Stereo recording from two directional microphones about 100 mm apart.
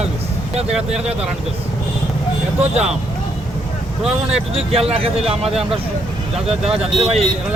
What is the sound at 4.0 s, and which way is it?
Speech, 5° right (ahead or behind).